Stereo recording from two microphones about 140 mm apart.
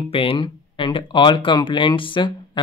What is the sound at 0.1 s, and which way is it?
Speech, 40° left (ahead or behind).